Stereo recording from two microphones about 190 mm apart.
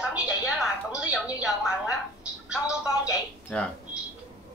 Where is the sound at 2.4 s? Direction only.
5° right (ahead or behind).